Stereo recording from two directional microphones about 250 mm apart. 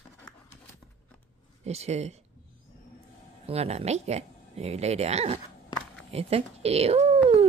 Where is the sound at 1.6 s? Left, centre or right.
Right.